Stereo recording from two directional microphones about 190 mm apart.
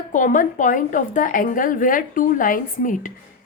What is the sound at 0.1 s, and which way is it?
A woman's voice, 45° left (ahead or behind).